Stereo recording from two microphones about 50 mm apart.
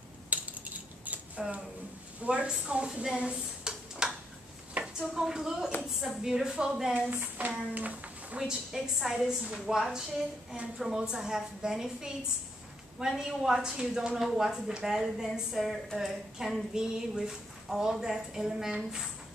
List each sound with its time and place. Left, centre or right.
0.3 s typing: right
1.0 s a sound: right
2.2 s speech: right
4.0 s a sound: centre
4.9 s a woman's voice: centre
6.9 s speech: right
8.4 s a woman's voice: centre
13.2 s a woman's voice: centre